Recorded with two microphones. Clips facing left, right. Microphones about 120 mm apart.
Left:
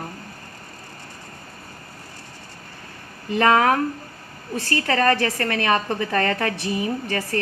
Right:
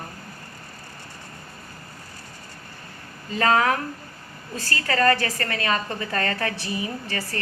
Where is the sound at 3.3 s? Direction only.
60° left (ahead or behind).